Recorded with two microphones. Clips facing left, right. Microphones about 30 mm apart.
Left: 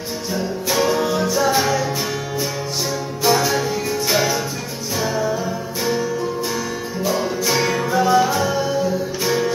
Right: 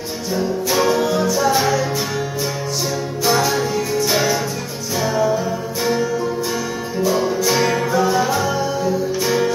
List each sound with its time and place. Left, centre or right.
0.3 s music: centre
1.3 s music: centre
1.6 s music: centre
3.3 s music: centre
7.1 s music: centre